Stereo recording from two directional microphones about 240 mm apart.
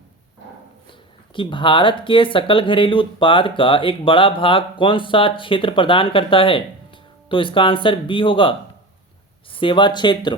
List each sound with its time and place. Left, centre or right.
0.9 s speech: left